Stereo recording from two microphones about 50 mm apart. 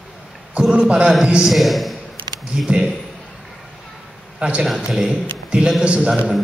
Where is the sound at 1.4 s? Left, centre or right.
Centre.